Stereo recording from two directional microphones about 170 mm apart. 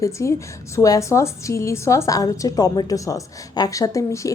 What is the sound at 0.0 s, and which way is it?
A woman's voice, 15° left (ahead or behind).